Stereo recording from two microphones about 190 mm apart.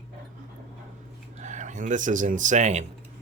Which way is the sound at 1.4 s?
40° right (ahead or behind).